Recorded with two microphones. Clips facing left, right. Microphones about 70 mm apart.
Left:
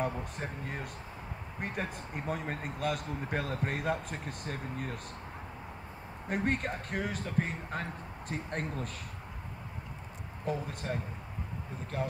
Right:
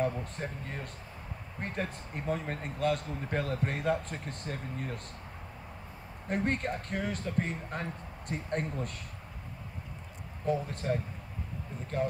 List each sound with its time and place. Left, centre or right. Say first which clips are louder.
0.0 s speech: right 2 dB; centre
6.2 s speech: right 1 dB; centre
10.4 s speech: right 4 dB; centre